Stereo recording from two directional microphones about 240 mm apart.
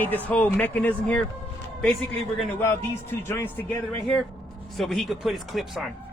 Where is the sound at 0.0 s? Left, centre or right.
Centre.